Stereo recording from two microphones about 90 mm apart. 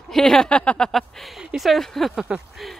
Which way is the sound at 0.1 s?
5° left (ahead or behind).